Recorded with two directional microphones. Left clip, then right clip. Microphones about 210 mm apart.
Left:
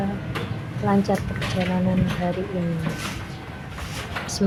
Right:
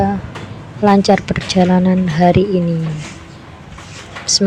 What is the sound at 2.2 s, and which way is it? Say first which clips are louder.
Speech: right 17 dB; 45° right (ahead or behind).